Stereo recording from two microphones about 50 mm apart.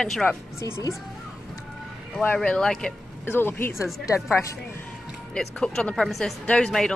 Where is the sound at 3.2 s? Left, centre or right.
Left.